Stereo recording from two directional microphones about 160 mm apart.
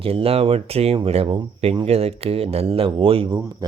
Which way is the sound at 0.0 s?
35° right (ahead or behind).